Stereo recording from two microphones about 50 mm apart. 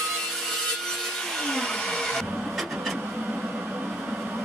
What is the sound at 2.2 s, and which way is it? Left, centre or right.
Vehicle, centre.